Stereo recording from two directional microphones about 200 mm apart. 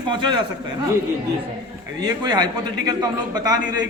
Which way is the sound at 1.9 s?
20° right (ahead or behind).